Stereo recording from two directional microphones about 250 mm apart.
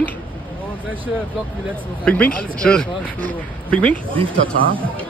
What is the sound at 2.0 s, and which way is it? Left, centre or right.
Speech, centre.